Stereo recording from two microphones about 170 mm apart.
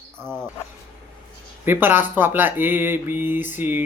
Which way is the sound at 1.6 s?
10° right (ahead or behind).